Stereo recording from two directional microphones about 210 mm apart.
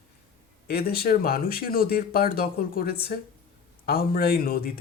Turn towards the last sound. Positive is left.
turn(degrees=45)  # may be behind; listen again after turning